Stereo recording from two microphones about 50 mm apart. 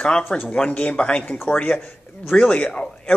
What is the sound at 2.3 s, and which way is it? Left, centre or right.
Speech, left.